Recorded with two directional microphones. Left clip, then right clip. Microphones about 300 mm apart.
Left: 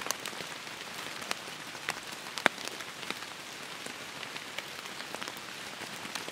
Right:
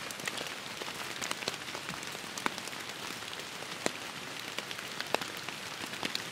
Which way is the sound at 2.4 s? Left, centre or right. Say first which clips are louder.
Left 8 dB; left.